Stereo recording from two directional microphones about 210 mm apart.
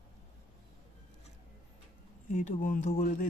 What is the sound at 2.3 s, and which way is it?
Speech, 40° left (ahead or behind).